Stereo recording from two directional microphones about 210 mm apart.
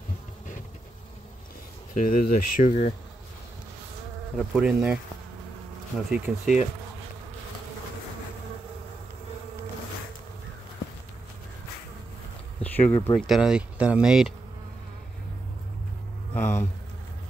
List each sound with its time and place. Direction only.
2.0 s speech: 40° left (ahead or behind)
4.4 s speech: 5° right (ahead or behind)
5.9 s speech: 5° right (ahead or behind)
12.6 s speech: 10° left (ahead or behind)
13.3 s speech: 5° right (ahead or behind)
16.3 s a sound: 10° left (ahead or behind)